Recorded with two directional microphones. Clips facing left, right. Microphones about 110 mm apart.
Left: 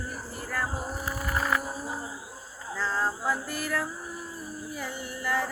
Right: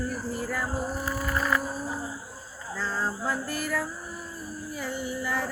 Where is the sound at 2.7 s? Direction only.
Centre (ahead or behind).